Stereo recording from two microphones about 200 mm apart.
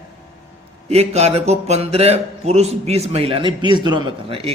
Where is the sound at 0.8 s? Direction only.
30° right (ahead or behind).